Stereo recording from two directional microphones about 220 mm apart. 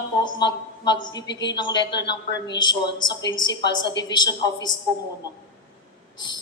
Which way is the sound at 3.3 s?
55° left (ahead or behind).